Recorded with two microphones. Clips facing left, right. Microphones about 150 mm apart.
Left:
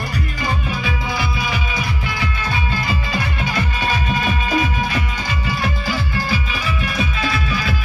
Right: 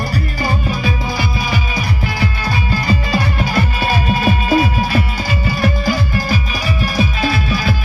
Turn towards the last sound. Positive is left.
turn(degrees=-35)  # may be behind; listen again after turning